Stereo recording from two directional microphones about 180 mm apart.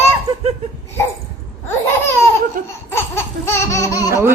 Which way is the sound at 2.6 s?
50° right (ahead or behind).